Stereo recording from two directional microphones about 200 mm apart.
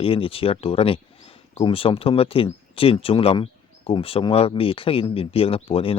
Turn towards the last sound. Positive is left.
turn(degrees=30)  # may be behind; listen again after turning